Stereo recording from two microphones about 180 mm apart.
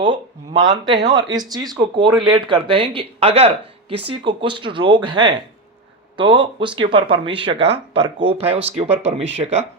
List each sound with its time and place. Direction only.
0.0 s speech: 25° right (ahead or behind)